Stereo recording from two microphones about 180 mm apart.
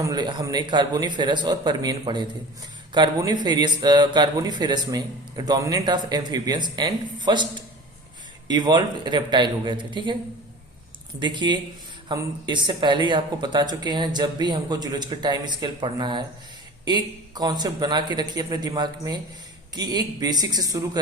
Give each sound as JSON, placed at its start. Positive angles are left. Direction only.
{"t": 0.0, "sound": "speech", "side_deg": -20}
{"t": 11.2, "sound": "speech", "side_deg": -25}